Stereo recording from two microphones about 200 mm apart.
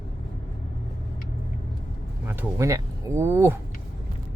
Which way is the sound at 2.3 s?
15° right (ahead or behind).